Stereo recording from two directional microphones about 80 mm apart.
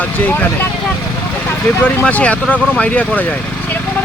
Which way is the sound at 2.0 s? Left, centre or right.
Centre.